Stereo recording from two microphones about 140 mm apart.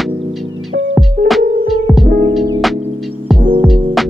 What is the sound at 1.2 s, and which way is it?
Music, 90° right.